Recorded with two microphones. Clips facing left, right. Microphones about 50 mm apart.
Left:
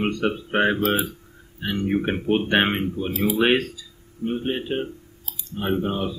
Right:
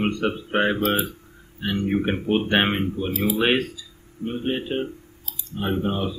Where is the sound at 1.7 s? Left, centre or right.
Centre.